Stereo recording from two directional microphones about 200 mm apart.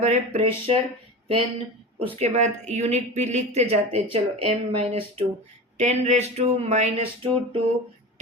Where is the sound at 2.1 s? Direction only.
35° right (ahead or behind).